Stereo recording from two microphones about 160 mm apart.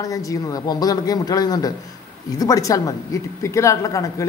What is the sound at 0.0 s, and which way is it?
A man's voice, 20° left (ahead or behind).